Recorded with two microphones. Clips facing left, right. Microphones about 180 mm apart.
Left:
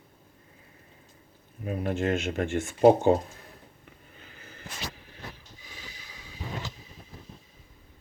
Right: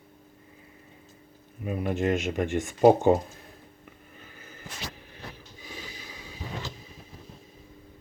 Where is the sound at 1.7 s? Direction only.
15° right (ahead or behind).